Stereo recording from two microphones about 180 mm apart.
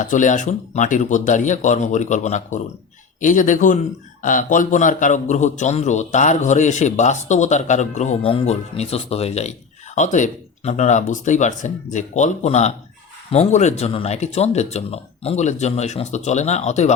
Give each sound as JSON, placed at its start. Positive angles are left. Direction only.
{"t": 0.0, "sound": "a man's voice", "side_deg": 45}